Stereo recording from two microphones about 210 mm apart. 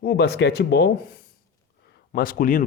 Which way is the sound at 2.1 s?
40° left (ahead or behind).